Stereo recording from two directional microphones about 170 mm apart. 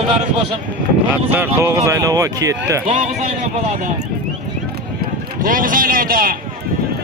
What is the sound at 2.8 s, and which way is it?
Speech, 45° right (ahead or behind).